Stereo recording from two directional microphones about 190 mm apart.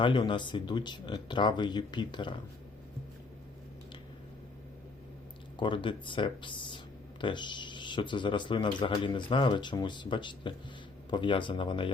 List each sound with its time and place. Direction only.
0.0 s speech: 25° left (ahead or behind)
5.5 s speech: 25° left (ahead or behind)